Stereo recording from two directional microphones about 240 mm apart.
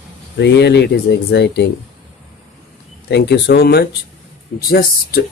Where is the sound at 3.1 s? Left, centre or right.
Left.